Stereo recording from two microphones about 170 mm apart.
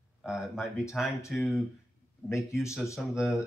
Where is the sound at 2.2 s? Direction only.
15° left (ahead or behind).